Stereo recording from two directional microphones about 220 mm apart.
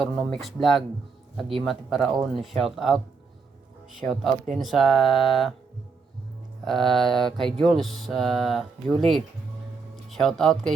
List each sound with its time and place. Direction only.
0.0 s music: centre (ahead or behind)
4.0 s music: centre (ahead or behind)
6.7 s music: centre (ahead or behind)
9.9 s speech: centre (ahead or behind)